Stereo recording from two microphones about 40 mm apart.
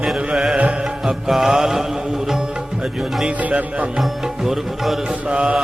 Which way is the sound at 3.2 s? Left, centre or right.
Right.